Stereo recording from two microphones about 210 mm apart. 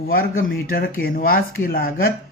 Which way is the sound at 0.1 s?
45° left (ahead or behind).